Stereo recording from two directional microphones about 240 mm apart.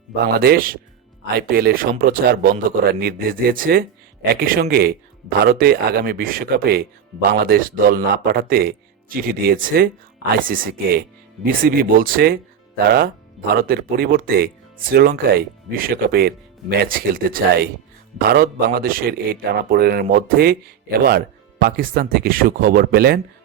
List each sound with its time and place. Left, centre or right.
0.2 s speech: right